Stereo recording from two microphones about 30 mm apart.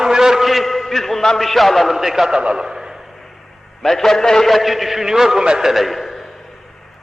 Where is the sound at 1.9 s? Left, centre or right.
Centre.